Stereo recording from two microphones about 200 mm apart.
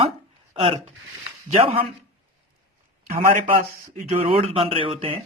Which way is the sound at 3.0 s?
45° right (ahead or behind).